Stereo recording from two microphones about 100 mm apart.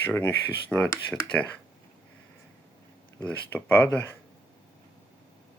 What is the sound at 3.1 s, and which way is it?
Speech, 15° left (ahead or behind).